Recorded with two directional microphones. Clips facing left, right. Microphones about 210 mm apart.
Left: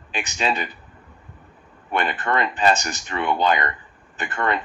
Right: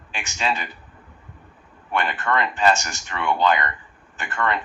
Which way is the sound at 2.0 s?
20° left (ahead or behind).